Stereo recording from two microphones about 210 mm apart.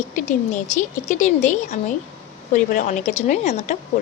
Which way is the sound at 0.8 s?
35° left (ahead or behind).